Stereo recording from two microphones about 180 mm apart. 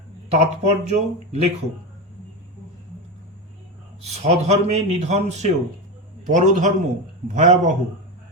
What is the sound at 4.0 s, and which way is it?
A man's voice, 35° right (ahead or behind).